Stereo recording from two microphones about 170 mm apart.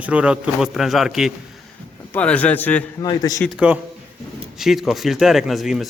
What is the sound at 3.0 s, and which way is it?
Speech, 20° left (ahead or behind).